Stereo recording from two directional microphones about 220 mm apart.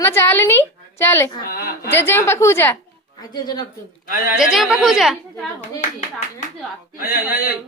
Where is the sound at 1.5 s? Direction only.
45° left (ahead or behind).